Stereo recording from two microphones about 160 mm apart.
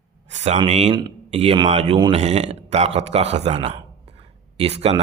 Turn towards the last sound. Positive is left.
turn(degrees=-40)  # may be behind; listen again after turning